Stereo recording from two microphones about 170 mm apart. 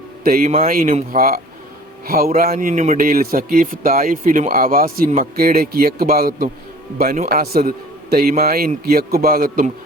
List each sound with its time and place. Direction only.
0.3 s speech: 55° right (ahead or behind)
2.5 s speech: 50° right (ahead or behind)